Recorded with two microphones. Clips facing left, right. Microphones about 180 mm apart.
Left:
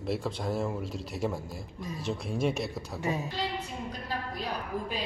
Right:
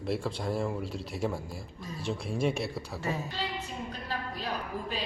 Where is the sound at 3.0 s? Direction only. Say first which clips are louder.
Left 3 dB; 15° left (ahead or behind).